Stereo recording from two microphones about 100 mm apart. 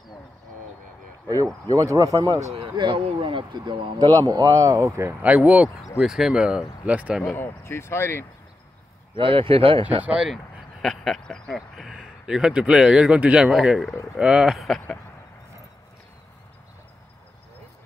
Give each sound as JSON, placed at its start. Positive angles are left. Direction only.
{"t": 1.3, "sound": "speech", "side_deg": -40}
{"t": 2.7, "sound": "speech", "side_deg": -50}
{"t": 4.3, "sound": "speech", "side_deg": -40}
{"t": 5.2, "sound": "speech", "side_deg": -15}
{"t": 5.9, "sound": "speech", "side_deg": -5}
{"t": 7.3, "sound": "speech", "side_deg": 25}
{"t": 9.1, "sound": "speech", "side_deg": -60}
{"t": 10.0, "sound": "speech", "side_deg": -10}
{"t": 10.3, "sound": "speech", "side_deg": 5}